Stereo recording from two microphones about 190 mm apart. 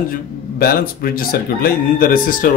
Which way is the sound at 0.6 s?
50° left (ahead or behind).